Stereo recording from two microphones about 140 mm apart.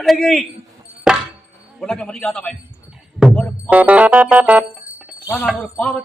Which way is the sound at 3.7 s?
10° right (ahead or behind).